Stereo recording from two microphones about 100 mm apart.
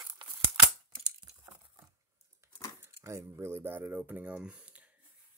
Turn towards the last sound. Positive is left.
turn(degrees=-10)  # may be behind; listen again after turning